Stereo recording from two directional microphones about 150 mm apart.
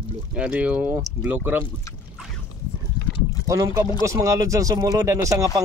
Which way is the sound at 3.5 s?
20° right (ahead or behind).